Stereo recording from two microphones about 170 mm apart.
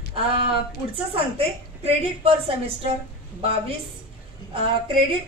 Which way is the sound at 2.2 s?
35° right (ahead or behind).